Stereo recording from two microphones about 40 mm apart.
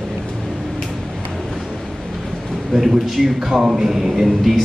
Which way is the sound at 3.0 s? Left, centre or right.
Centre.